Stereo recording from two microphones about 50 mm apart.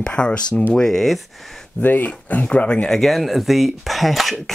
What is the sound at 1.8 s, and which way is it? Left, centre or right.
Speech, left.